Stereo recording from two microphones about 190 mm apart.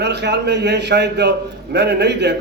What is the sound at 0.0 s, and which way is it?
A man's voice, 65° right (ahead or behind).